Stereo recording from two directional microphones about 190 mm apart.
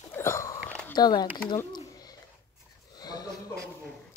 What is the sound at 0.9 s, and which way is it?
Speech, 20° left (ahead or behind).